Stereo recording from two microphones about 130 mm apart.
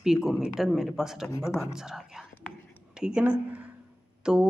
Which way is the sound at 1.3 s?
25° left (ahead or behind).